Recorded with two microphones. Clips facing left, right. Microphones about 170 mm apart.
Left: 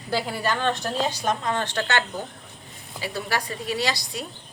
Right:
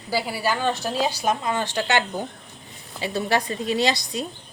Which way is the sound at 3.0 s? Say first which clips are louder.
Right 5 dB; 25° right (ahead or behind).